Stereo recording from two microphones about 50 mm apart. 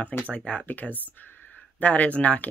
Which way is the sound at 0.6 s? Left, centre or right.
Left.